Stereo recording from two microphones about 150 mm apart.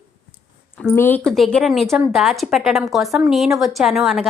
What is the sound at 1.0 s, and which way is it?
Speech, 10° left (ahead or behind).